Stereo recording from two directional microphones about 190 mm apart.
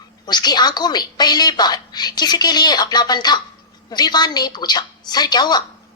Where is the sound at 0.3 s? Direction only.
20° left (ahead or behind).